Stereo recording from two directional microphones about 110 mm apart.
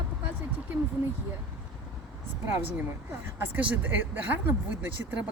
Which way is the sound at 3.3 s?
20° right (ahead or behind).